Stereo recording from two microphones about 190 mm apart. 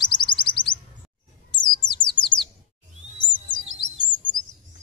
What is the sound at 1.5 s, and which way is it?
Bird, 25° left (ahead or behind).